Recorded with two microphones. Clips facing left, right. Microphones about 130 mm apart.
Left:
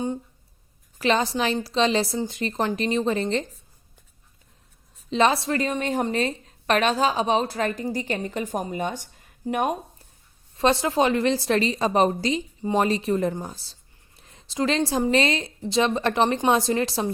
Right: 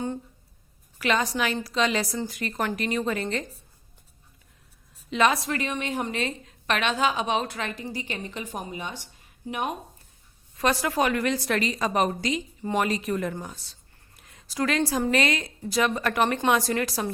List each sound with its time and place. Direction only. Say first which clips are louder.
0.9 s a woman's voice: left 3 dB; 30° left (ahead or behind)
5.1 s a woman's voice: left 3 dB; 30° left (ahead or behind); by 9.7 s 45° left (ahead or behind)
10.6 s a woman's voice: left 4 dB; 25° left (ahead or behind)